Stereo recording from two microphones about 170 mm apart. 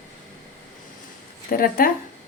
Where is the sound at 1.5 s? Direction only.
60° left (ahead or behind).